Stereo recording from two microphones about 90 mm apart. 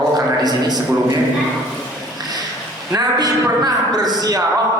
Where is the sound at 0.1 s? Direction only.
50° right (ahead or behind).